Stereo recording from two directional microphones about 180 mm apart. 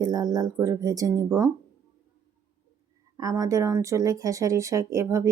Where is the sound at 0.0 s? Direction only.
20° right (ahead or behind).